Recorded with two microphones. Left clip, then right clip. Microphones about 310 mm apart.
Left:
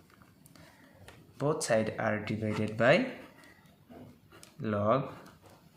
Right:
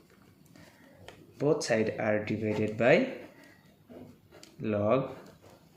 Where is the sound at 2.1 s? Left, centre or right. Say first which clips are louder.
Right 4 dB; left.